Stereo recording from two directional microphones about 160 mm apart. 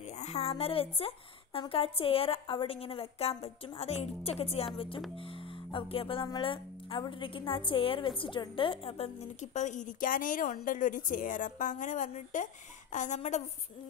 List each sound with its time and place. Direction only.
0.2 s a woman's voice: 40° left (ahead or behind)